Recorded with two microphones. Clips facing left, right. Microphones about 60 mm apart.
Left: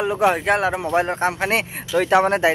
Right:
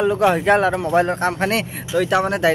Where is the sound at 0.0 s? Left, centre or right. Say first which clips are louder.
Right 2 dB; centre.